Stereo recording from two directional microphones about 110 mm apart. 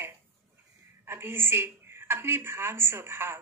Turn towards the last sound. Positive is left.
turn(degrees=-20)  # may be behind; listen again after turning